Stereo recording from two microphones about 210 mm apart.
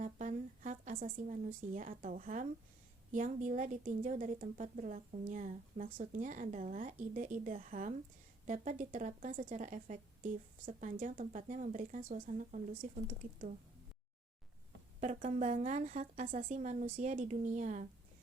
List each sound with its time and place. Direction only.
0.0 s speech: 35° right (ahead or behind)
15.0 s speech: 35° right (ahead or behind)